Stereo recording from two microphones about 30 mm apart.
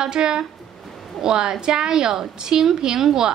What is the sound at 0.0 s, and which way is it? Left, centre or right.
A woman's voice, right.